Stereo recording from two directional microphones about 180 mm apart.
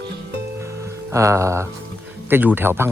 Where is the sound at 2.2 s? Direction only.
10° right (ahead or behind).